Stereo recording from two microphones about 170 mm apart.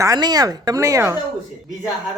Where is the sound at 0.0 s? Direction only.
20° right (ahead or behind).